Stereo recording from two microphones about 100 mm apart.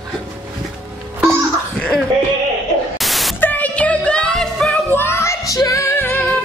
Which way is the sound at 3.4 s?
15° left (ahead or behind).